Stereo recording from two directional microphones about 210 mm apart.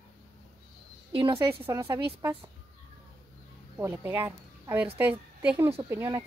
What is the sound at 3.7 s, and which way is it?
A woman's voice, 10° right (ahead or behind).